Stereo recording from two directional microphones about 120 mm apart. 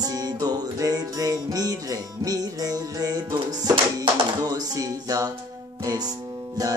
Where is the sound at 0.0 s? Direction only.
30° right (ahead or behind).